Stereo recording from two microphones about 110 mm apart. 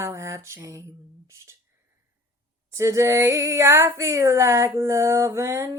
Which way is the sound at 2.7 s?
25° right (ahead or behind).